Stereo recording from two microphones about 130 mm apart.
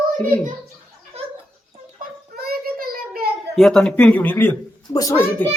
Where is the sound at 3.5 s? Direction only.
5° left (ahead or behind); by 5.4 s 20° left (ahead or behind).